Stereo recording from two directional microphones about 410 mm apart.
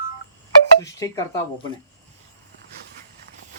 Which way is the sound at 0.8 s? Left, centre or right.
Centre.